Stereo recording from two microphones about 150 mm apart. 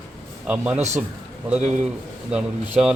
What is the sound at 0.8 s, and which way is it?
Speech, 50° right (ahead or behind).